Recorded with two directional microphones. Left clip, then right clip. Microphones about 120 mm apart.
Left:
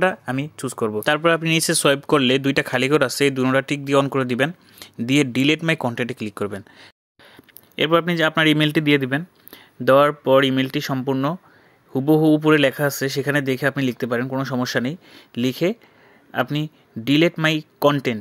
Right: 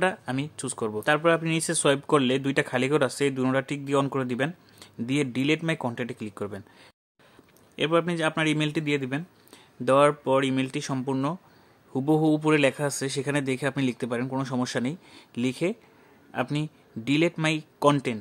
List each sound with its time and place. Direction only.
0.0 s speech: 25° left (ahead or behind)
1.0 s speech: 40° left (ahead or behind)
1.4 s speech: 30° left (ahead or behind); by 9.1 s 55° left (ahead or behind)
9.1 s speech: 30° left (ahead or behind)